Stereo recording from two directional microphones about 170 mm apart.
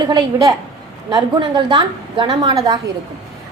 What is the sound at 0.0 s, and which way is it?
A woman's voice, 25° right (ahead or behind).